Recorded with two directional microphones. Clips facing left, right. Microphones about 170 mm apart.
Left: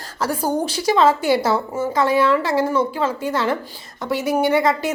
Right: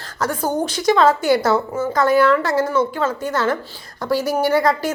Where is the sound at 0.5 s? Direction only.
30° left (ahead or behind).